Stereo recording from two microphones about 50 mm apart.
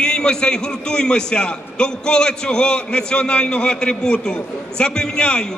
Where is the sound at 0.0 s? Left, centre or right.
Centre.